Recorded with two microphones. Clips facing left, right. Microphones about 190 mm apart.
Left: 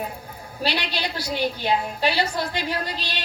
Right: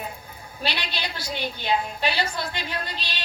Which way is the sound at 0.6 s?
40° left (ahead or behind).